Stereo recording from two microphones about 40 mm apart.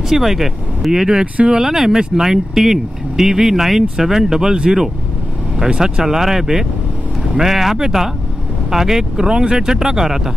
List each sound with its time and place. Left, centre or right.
0.1 s speech: centre
1.2 s speech: right
1.5 s speech: centre
5.6 s speech: right
6.0 s speech: centre